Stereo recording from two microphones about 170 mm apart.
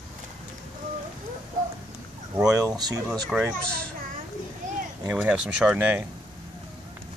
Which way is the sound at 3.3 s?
5° right (ahead or behind).